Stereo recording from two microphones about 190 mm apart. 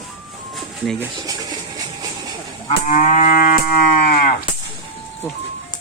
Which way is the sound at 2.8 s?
40° left (ahead or behind).